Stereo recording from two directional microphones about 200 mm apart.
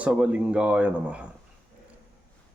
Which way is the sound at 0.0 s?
5° right (ahead or behind).